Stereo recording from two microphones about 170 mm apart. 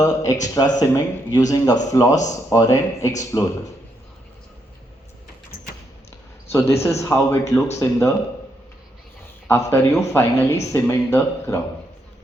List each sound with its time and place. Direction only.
0.0 s speech: 20° left (ahead or behind)
6.5 s a man's voice: 15° left (ahead or behind)
9.5 s speech: 15° left (ahead or behind)